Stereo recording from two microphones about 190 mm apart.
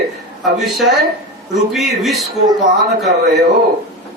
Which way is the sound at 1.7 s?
Centre (ahead or behind).